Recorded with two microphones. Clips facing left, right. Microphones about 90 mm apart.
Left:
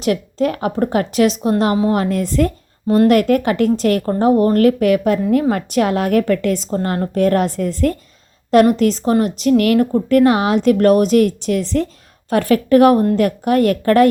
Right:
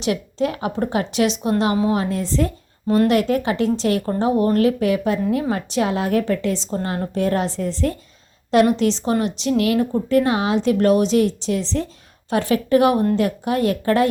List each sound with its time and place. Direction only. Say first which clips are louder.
0.0 s a woman's voice: left 4 dB; 45° left (ahead or behind)
2.9 s speech: left 4 dB; 45° left (ahead or behind)